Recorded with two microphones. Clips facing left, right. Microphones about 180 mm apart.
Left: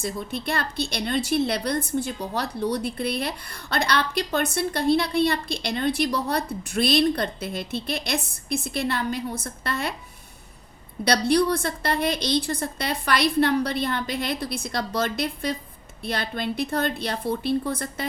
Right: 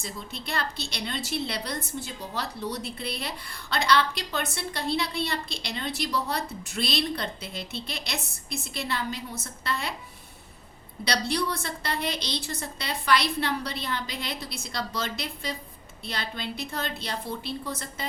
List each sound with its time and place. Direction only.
0.0 s a woman's voice: 55° left (ahead or behind)
11.0 s a woman's voice: 45° left (ahead or behind)